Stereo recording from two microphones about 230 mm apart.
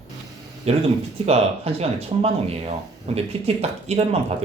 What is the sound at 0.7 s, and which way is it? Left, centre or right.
Speech, right.